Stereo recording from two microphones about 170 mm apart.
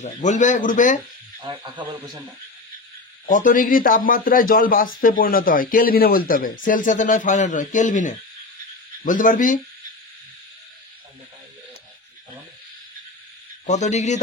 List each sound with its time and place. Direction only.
0.0 s a man's voice: 45° left (ahead or behind)
1.4 s speech: 30° right (ahead or behind)
3.3 s a man's voice: 50° left (ahead or behind)
13.7 s a man's voice: 45° left (ahead or behind)